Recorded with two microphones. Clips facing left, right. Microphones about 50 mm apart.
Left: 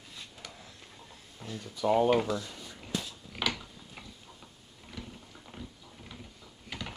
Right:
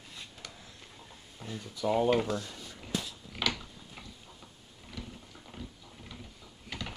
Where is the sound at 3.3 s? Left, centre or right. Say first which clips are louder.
Even; centre.